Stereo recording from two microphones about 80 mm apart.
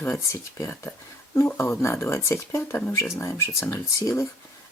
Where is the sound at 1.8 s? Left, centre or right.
Left.